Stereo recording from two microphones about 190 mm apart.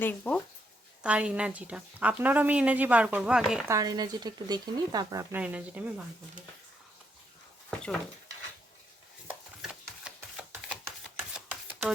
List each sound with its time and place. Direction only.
0.0 s speech: 5° left (ahead or behind)
1.0 s a woman's voice: 5° right (ahead or behind)
3.7 s speech: 20° right (ahead or behind)
5.3 s a woman's voice: 10° right (ahead or behind)
9.2 s chopping: 5° right (ahead or behind)
11.3 s a sound: 10° right (ahead or behind)